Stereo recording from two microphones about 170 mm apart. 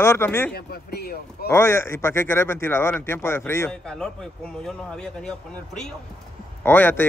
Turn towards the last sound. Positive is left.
turn(degrees=10)  # may be behind; listen again after turning